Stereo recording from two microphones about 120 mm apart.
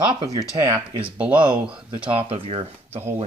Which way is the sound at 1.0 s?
45° right (ahead or behind).